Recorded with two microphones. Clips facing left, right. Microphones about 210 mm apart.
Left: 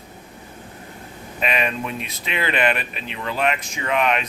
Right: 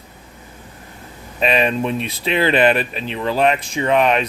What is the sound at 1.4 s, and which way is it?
Speech, 30° right (ahead or behind).